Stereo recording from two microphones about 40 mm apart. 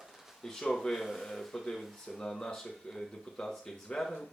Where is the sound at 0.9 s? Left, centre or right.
Centre.